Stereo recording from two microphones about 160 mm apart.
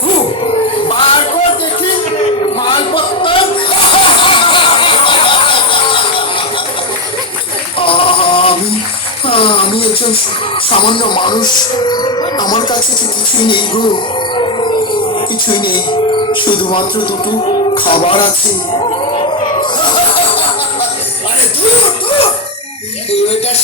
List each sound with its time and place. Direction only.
0.4 s dog: 35° left (ahead or behind)
2.6 s a sound: 30° left (ahead or behind)
7.8 s music: 35° left (ahead or behind)
9.2 s a sound: 35° left (ahead or behind)
10.7 s speech: 35° left (ahead or behind)
17.8 s music: 35° left (ahead or behind)
19.9 s music: 35° left (ahead or behind)
21.8 s music: 35° left (ahead or behind)